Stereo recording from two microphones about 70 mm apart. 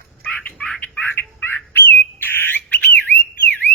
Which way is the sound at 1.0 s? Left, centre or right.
Left.